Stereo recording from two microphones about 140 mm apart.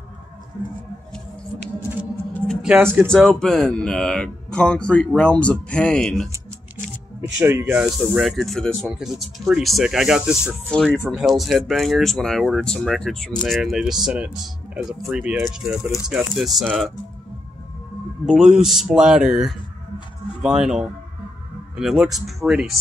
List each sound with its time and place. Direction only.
2.3 s music: 5° left (ahead or behind)
2.7 s speech: 15° right (ahead or behind)
3.1 s speech: centre (ahead or behind)
7.3 s speech: 15° right (ahead or behind)
18.3 s speech: 5° right (ahead or behind)